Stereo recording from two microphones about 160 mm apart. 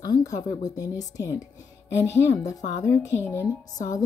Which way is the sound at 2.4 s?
20° left (ahead or behind).